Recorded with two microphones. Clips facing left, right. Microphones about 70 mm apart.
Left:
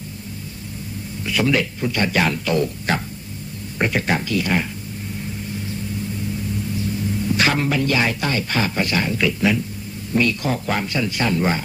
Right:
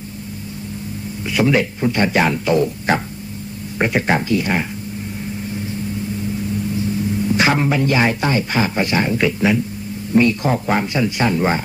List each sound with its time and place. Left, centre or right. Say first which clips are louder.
1.2 s speech: right 3 dB; right
7.2 s speech: right 3 dB; centre